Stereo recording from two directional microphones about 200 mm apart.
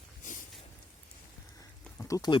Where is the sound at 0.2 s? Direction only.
40° left (ahead or behind).